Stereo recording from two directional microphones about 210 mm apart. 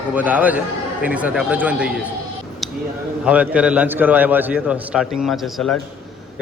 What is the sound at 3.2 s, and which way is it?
A man's voice, 5° right (ahead or behind).